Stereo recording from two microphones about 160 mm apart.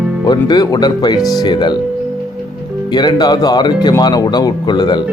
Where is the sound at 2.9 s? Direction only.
25° left (ahead or behind).